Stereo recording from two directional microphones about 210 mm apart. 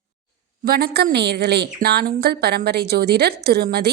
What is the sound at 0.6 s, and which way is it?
A woman's voice, 45° right (ahead or behind).